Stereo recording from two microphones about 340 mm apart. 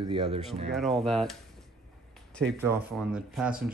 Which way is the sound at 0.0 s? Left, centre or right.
Centre.